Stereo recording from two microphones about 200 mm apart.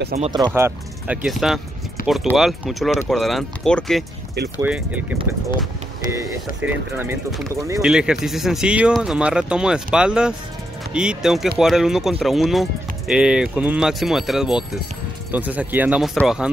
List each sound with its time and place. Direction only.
0.2 s speech: 20° right (ahead or behind)
0.6 s speech: 10° right (ahead or behind)
2.0 s a sound: 45° left (ahead or behind)
2.3 s speech: centre (ahead or behind)
6.1 s speech: 10° right (ahead or behind)
7.4 s speech: 15° right (ahead or behind)
7.8 s speech: 5° right (ahead or behind)